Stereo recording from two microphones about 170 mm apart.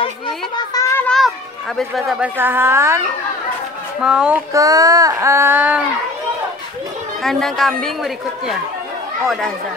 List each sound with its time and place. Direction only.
0.7 s children playing: 10° left (ahead or behind)
1.8 s speech: centre (ahead or behind); by 3.0 s 15° right (ahead or behind)
4.0 s a woman's voice: 5° right (ahead or behind)
4.6 s speech: 20° right (ahead or behind)
7.2 s a woman's voice: centre (ahead or behind)